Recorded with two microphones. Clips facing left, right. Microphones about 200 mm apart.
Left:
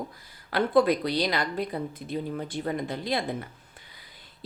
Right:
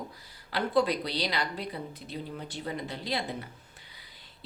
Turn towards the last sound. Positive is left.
turn(degrees=50)  # may be behind; listen again after turning